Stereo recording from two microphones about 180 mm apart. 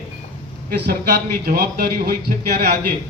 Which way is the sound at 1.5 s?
55° right (ahead or behind).